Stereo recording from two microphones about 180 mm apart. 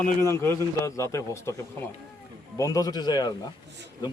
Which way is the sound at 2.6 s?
20° left (ahead or behind).